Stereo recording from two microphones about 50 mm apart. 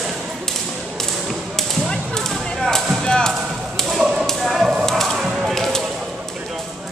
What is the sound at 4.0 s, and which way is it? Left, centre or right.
Tap, centre.